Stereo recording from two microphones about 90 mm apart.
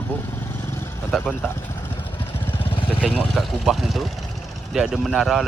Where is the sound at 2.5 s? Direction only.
85° left.